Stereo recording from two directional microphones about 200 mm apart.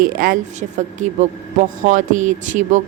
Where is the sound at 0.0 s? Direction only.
45° right (ahead or behind).